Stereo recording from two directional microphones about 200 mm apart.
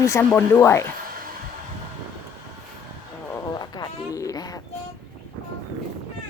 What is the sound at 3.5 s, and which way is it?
Music, 20° left (ahead or behind).